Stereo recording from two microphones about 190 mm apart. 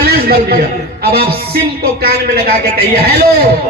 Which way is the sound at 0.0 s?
55° right (ahead or behind).